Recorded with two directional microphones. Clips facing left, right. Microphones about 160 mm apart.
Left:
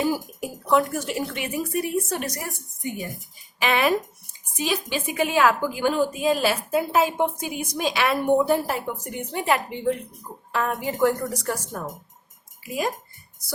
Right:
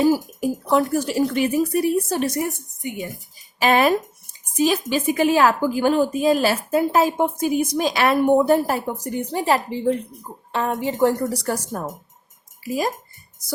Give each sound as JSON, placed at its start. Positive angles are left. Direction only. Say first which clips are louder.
{"t": 0.0, "sound": "a woman's voice", "louder": "right 7 dB", "side_deg": -35}
{"t": 3.6, "sound": "a woman's voice", "louder": "right 4 dB", "side_deg": -40}